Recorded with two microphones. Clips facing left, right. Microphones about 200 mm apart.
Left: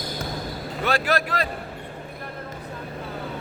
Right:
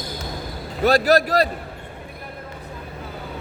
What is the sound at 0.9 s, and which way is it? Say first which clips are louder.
Speech: right 7 dB; 40° right (ahead or behind).